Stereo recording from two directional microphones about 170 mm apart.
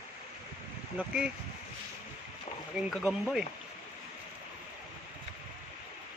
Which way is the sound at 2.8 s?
Centre (ahead or behind).